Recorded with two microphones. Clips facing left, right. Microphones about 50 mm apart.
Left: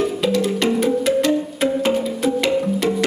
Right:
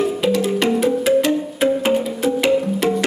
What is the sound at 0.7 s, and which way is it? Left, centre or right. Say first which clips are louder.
Music: right 1 dB; centre.